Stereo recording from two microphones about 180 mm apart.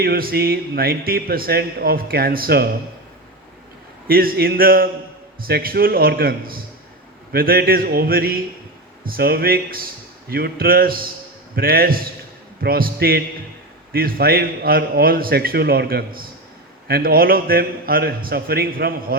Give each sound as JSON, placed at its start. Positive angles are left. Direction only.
{"t": 0.0, "sound": "speech", "side_deg": -55}
{"t": 4.0, "sound": "speech", "side_deg": -55}